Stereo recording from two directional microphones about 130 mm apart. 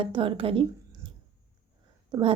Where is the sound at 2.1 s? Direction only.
40° right (ahead or behind).